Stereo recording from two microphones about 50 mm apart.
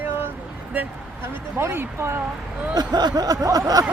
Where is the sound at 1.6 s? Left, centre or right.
Right.